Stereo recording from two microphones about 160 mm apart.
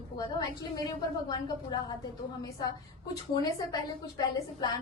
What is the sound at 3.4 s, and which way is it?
A woman's voice, 25° left (ahead or behind).